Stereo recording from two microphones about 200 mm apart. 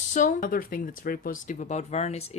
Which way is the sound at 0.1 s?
40° left (ahead or behind).